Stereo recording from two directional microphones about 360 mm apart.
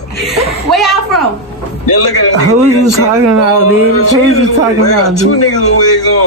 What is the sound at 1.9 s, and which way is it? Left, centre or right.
A man's voice, left.